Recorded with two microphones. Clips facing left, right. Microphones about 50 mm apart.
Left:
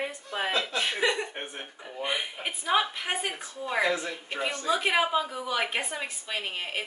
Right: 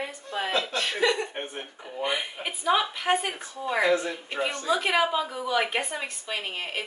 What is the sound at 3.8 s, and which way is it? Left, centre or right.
Speech, right.